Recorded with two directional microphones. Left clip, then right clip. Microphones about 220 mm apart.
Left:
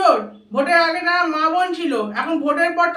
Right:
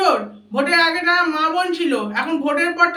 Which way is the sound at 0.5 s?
15° left (ahead or behind).